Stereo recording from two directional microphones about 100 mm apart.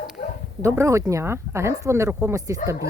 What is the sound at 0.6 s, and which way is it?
Speech, 30° right (ahead or behind).